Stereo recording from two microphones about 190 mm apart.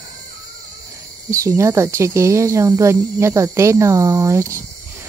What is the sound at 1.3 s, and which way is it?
Speech, 15° right (ahead or behind).